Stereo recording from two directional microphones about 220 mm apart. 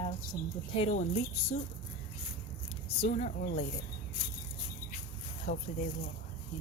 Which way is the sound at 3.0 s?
30° left (ahead or behind).